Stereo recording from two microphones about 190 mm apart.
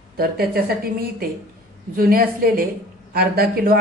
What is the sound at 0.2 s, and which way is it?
Speech, 50° right (ahead or behind).